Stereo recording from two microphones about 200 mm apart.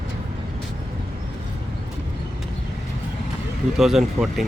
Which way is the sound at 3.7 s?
Centre (ahead or behind).